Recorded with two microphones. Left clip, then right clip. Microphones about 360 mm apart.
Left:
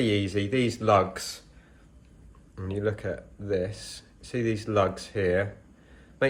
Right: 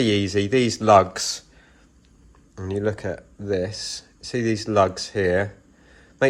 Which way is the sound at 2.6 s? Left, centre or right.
Centre.